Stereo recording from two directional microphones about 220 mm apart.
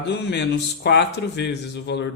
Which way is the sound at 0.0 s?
50° left (ahead or behind).